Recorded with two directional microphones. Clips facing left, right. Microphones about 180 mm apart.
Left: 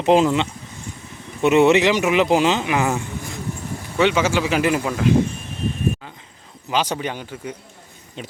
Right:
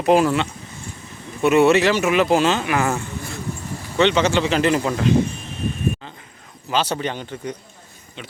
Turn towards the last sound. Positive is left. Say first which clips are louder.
# right 2 dB
turn(degrees=10)  # may be behind; listen again after turning